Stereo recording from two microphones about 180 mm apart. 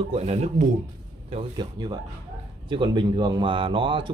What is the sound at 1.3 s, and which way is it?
Speech, 25° right (ahead or behind).